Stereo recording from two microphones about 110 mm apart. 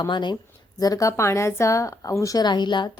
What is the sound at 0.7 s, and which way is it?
Speech, 35° left (ahead or behind).